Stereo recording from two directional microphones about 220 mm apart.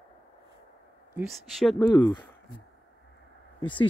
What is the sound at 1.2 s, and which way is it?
Speech, centre (ahead or behind).